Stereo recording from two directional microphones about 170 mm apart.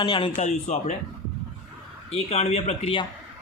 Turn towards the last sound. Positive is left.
turn(degrees=35)  # may be behind; listen again after turning